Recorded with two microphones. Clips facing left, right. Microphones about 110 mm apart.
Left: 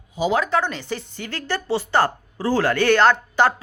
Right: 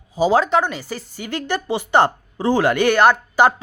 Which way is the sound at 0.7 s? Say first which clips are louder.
Even; 10° right (ahead or behind).